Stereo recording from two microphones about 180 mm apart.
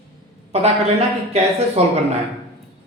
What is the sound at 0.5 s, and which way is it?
Speech, 35° right (ahead or behind).